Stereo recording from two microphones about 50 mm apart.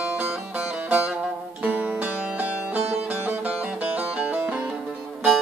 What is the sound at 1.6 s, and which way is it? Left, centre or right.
Music, right.